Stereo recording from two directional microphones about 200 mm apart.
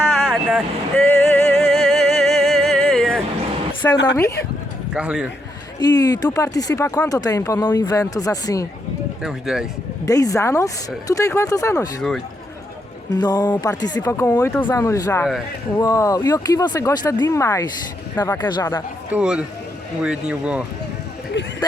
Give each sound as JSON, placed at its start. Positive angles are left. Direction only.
{"t": 0.0, "sound": "vehicle", "side_deg": 0}
{"t": 3.9, "sound": "a woman's voice", "side_deg": 60}
{"t": 4.9, "sound": "speech", "side_deg": -5}
{"t": 5.8, "sound": "speech", "side_deg": 20}
{"t": 9.2, "sound": "speech", "side_deg": 0}
{"t": 10.1, "sound": "speech", "side_deg": 15}
{"t": 13.1, "sound": "speech", "side_deg": 20}
{"t": 19.1, "sound": "speech", "side_deg": -5}